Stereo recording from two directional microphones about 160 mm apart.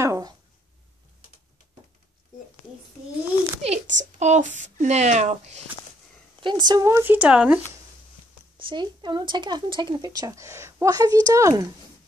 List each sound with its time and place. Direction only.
0.0 s a sound: 20° right (ahead or behind)
3.6 s a woman's voice: 45° right (ahead or behind)
6.4 s speech: 25° right (ahead or behind); by 7.6 s 10° right (ahead or behind)
8.5 s speech: 30° right (ahead or behind)